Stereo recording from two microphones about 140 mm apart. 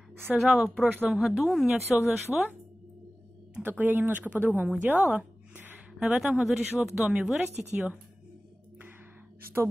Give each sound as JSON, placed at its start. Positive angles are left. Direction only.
{"t": 0.4, "sound": "speech", "side_deg": -5}
{"t": 3.5, "sound": "a woman's voice", "side_deg": -10}